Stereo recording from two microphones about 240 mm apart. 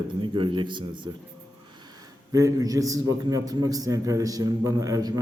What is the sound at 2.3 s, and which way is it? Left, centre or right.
A man's voice, centre.